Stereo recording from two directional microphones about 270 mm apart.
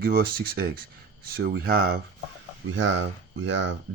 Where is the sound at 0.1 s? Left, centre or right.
Right.